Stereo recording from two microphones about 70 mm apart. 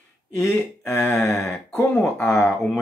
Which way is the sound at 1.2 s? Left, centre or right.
Left.